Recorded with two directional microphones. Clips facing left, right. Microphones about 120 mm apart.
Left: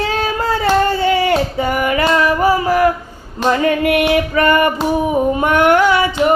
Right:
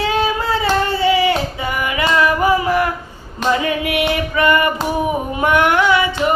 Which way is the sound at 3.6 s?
45° left (ahead or behind).